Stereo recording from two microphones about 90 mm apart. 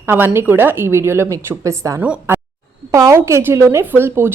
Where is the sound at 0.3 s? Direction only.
25° right (ahead or behind).